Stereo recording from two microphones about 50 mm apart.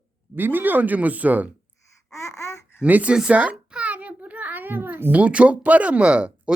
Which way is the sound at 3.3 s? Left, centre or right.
Right.